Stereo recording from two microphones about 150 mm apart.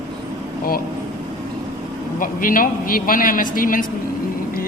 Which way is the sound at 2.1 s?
65° left (ahead or behind).